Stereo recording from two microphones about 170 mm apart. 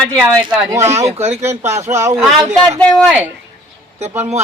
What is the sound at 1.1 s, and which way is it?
Speech, 40° right (ahead or behind).